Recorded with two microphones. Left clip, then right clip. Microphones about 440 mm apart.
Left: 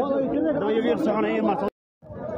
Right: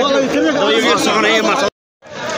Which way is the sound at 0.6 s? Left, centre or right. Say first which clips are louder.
Right 10 dB; left.